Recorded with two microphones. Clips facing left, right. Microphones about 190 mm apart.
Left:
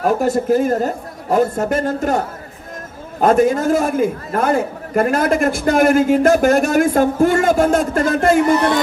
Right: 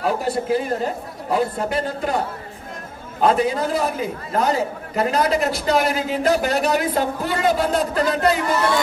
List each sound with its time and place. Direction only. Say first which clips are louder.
0.0 s a man's voice: left 5 dB; 45° left (ahead or behind)